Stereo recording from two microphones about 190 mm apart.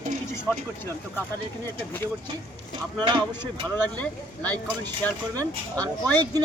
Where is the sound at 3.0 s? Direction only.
25° right (ahead or behind).